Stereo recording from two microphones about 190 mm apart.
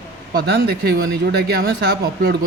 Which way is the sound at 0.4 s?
60° right (ahead or behind).